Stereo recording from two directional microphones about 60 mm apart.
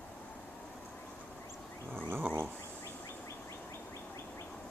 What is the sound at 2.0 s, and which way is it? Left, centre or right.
Dog, right.